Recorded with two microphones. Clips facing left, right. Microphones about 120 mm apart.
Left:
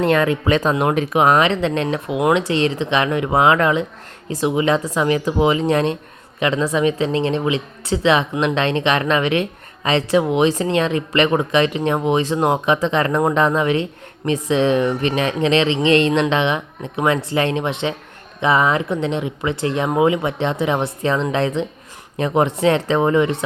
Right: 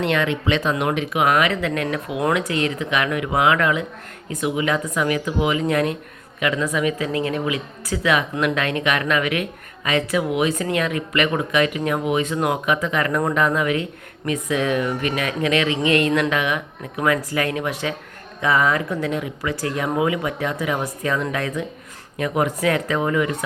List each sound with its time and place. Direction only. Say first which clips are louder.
0.0 s a woman's voice: left 4 dB; 40° left (ahead or behind)